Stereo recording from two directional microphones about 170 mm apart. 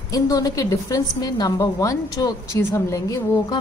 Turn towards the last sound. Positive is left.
turn(degrees=20)  # may be behind; listen again after turning